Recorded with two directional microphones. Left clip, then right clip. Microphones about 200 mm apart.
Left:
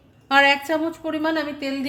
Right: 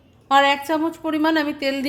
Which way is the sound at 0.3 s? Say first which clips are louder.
Even; 5° right (ahead or behind).